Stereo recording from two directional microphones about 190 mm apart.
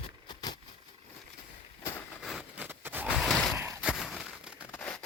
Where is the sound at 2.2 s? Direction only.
Centre (ahead or behind).